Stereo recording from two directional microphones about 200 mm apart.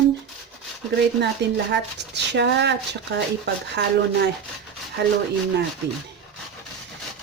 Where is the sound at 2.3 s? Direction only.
60° right (ahead or behind).